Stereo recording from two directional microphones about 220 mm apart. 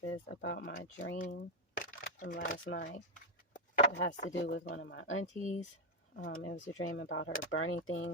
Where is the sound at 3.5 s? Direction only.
35° left (ahead or behind).